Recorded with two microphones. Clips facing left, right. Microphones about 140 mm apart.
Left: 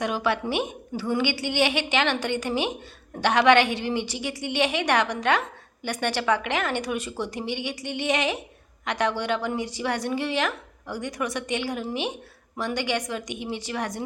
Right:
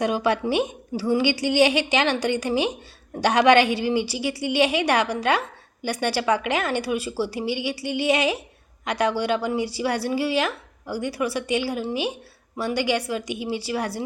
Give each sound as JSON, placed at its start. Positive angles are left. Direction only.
{"t": 0.0, "sound": "a woman's voice", "side_deg": -15}